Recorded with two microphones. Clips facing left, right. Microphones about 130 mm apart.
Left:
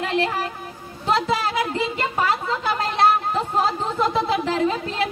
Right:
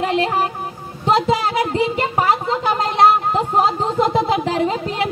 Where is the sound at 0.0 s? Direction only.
20° right (ahead or behind).